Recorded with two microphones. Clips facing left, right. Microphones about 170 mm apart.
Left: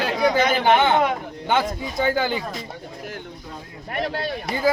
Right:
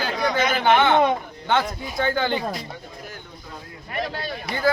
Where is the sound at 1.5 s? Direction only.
10° left (ahead or behind).